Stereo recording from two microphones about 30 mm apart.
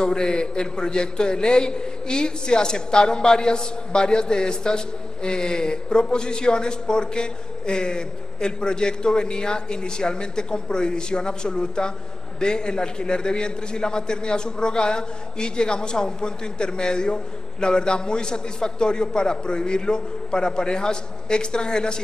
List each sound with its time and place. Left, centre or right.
0.0 s a man's voice: left